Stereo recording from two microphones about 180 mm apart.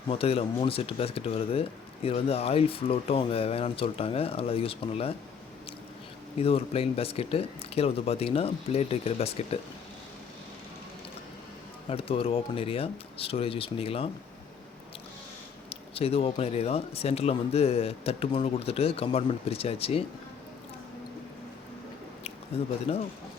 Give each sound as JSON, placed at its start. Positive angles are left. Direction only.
{"t": 0.1, "sound": "speech", "side_deg": 30}
{"t": 6.4, "sound": "speech", "side_deg": 30}
{"t": 11.9, "sound": "speech", "side_deg": 30}
{"t": 15.7, "sound": "speech", "side_deg": 30}
{"t": 22.2, "sound": "speech", "side_deg": 35}